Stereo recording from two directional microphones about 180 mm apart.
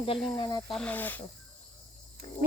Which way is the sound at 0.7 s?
5° left (ahead or behind).